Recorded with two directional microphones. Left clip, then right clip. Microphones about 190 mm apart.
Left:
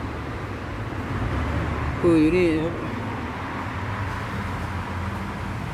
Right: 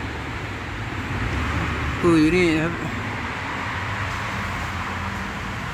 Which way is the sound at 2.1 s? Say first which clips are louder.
Right 1 dB; 20° right (ahead or behind).